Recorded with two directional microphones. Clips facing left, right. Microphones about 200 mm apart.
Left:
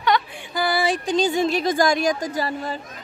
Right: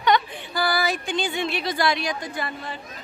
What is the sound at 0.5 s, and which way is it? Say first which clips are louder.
A woman's voice: left 3 dB; 25° left (ahead or behind).